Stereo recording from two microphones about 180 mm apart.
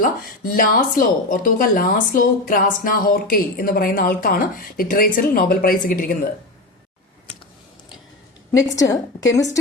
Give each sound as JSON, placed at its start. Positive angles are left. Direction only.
{"t": 0.5, "sound": "a woman's voice", "side_deg": 50}
{"t": 8.5, "sound": "a woman's voice", "side_deg": 20}